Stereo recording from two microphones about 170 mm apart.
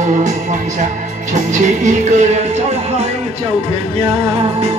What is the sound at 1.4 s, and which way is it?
Music, 45° right (ahead or behind).